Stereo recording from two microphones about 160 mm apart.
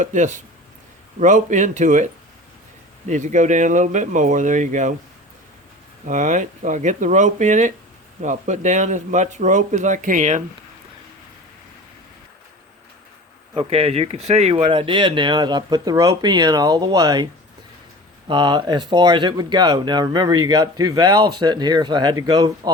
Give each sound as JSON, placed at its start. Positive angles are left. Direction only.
{"t": 0.0, "sound": "speech", "side_deg": -50}
{"t": 3.1, "sound": "speech", "side_deg": -50}
{"t": 6.1, "sound": "speech", "side_deg": -50}
{"t": 13.5, "sound": "speech", "side_deg": -40}
{"t": 18.3, "sound": "speech", "side_deg": -30}